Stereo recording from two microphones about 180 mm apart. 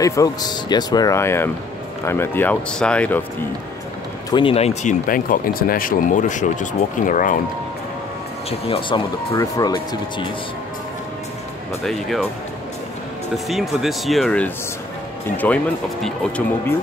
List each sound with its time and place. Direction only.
0.0 s speech: 20° left (ahead or behind)
4.3 s speech: 30° left (ahead or behind)
5.0 s speech: 50° left (ahead or behind)
8.5 s speech: 30° left (ahead or behind)
11.8 s speech: centre (ahead or behind)
13.5 s speech: centre (ahead or behind)